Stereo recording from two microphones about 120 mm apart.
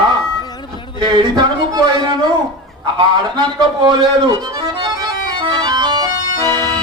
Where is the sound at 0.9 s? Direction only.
40° right (ahead or behind).